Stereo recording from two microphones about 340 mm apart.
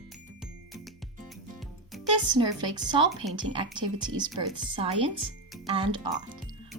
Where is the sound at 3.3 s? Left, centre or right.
Centre.